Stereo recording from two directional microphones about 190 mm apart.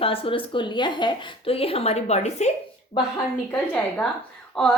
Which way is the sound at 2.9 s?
25° left (ahead or behind).